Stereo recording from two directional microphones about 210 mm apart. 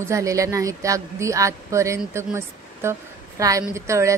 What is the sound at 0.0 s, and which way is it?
Speech, 15° right (ahead or behind).